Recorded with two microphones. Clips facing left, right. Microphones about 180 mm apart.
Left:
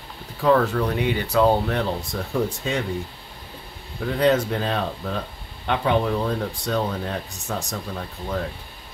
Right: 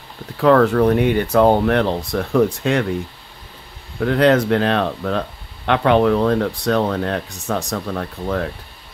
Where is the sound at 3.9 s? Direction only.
75° right (ahead or behind).